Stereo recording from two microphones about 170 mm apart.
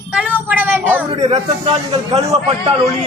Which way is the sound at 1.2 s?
35° right (ahead or behind).